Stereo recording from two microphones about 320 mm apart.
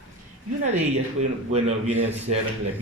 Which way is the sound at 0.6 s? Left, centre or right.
Right.